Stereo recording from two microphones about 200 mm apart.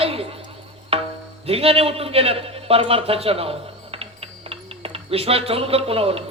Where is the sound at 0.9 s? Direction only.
30° right (ahead or behind).